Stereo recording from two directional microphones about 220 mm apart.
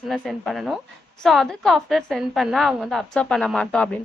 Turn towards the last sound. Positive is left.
turn(degrees=5)  # may be behind; listen again after turning